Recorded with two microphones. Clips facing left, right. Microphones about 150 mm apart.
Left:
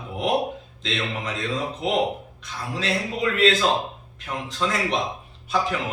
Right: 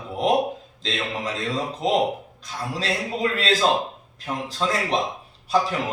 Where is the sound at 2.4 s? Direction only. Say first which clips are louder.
Even; 35° right (ahead or behind).